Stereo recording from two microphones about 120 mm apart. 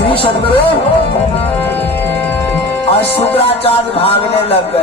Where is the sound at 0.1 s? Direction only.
50° left (ahead or behind).